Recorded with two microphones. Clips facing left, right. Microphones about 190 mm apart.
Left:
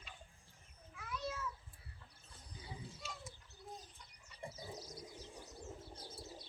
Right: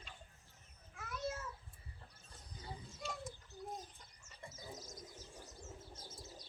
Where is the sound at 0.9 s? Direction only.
45° right (ahead or behind).